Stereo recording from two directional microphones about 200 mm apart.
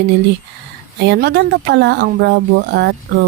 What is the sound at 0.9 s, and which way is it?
Speech, 55° right (ahead or behind).